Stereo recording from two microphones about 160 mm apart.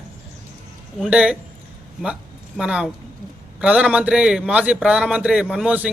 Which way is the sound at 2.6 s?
5° right (ahead or behind).